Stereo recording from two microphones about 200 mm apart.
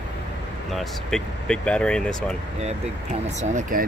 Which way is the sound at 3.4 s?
40° right (ahead or behind).